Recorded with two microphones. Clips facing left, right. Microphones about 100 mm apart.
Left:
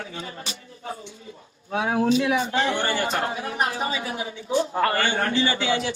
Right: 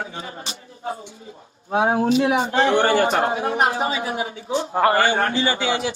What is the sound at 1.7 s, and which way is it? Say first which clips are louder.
A man's voice: right 3 dB; 35° right (ahead or behind).